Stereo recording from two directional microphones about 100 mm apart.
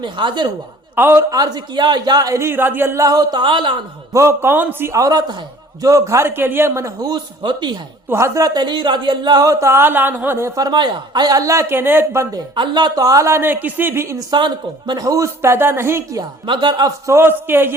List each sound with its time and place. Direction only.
0.0 s speech: 50° right (ahead or behind)
0.9 s speech: 20° right (ahead or behind)
1.3 s speech: 40° right (ahead or behind)
3.4 s a man's voice: 55° right (ahead or behind)
4.1 s speech: 30° right (ahead or behind)
4.9 s speech: 35° right (ahead or behind)
7.4 s speech: 50° right (ahead or behind)
8.1 s speech: 30° right (ahead or behind)
10.7 s speech: 45° right (ahead or behind); by 12.4 s 30° right (ahead or behind)
12.5 s speech: 50° right (ahead or behind); by 14.2 s 25° right (ahead or behind)
14.2 s speech: 50° right (ahead or behind)
15.0 s speech: 30° right (ahead or behind)
16.5 s speech: 50° right (ahead or behind)
17.1 s speech: 25° right (ahead or behind)